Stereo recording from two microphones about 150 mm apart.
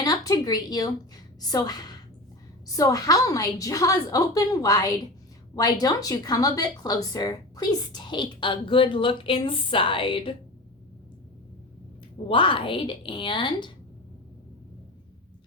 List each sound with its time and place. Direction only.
0.0 s a woman's voice: 25° left (ahead or behind)
12.3 s speech: 35° left (ahead or behind)